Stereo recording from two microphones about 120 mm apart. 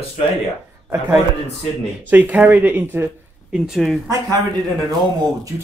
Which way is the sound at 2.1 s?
15° right (ahead or behind).